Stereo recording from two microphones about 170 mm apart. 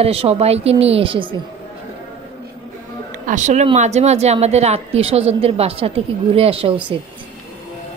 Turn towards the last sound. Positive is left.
turn(degrees=-35)  # may be behind; listen again after turning